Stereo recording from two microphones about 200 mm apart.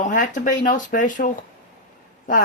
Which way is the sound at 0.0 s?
40° left (ahead or behind).